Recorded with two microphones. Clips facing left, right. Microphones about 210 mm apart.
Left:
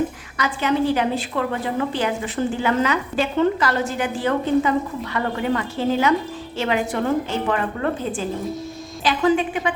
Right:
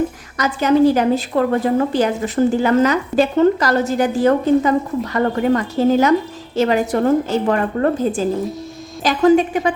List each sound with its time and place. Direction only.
0.3 s a woman's voice: 40° right (ahead or behind)